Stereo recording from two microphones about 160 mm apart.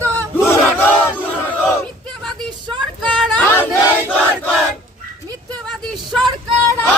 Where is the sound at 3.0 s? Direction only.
5° left (ahead or behind).